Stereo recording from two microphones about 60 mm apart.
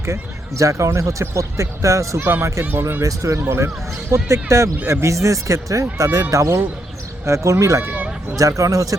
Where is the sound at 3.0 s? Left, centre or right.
Right.